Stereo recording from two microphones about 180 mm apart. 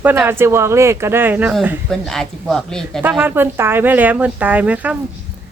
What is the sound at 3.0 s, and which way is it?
Speech, 10° right (ahead or behind).